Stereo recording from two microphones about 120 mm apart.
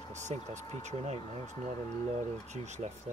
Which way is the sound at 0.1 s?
80° right.